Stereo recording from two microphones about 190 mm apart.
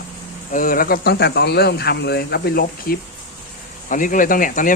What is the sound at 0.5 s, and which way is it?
Speech, 50° left (ahead or behind).